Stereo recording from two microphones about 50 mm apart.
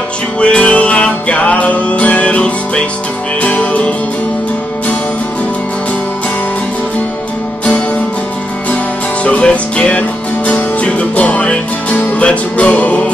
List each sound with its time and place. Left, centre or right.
0.4 s music: left
9.2 s music: left